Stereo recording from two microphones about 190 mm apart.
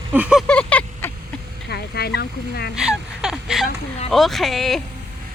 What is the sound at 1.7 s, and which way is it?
Speech, 60° left (ahead or behind).